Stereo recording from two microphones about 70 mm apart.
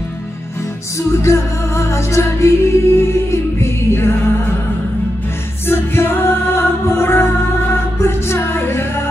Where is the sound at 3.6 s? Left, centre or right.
Left.